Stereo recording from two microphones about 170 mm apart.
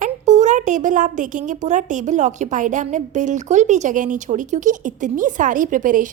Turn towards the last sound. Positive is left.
turn(degrees=-50)  # may be behind; listen again after turning